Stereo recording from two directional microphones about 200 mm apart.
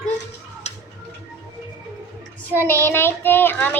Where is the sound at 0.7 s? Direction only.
30° left (ahead or behind).